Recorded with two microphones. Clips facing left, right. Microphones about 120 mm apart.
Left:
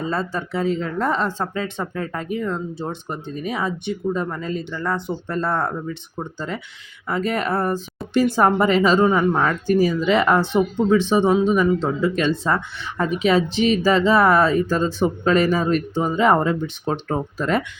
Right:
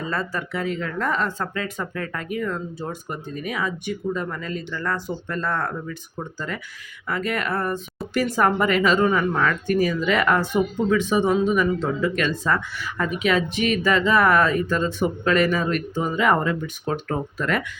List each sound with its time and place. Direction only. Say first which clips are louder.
0.1 s speech: left 3 dB; 30° left (ahead or behind)